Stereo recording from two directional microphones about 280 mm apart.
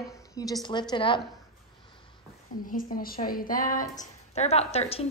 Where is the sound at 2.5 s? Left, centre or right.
Left.